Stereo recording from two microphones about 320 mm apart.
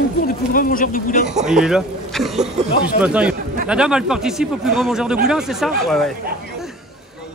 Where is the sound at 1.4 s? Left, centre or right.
Centre.